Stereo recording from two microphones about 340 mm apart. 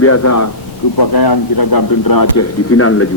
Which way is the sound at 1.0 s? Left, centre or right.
Left.